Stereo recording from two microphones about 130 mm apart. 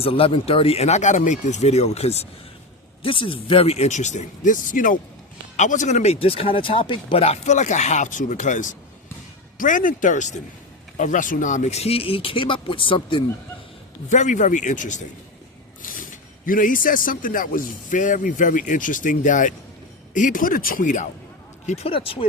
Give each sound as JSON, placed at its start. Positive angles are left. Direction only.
{"t": 0.0, "sound": "speech", "side_deg": 45}
{"t": 3.0, "sound": "speech", "side_deg": 40}
{"t": 5.5, "sound": "speech", "side_deg": 70}
{"t": 9.6, "sound": "speech", "side_deg": 90}
{"t": 14.1, "sound": "speech", "side_deg": 70}
{"t": 15.8, "sound": "a sound", "side_deg": 90}
{"t": 16.5, "sound": "speech", "side_deg": 90}
{"t": 21.7, "sound": "speech", "side_deg": 45}